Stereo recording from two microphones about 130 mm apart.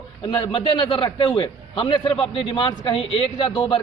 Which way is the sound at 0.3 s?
40° left (ahead or behind).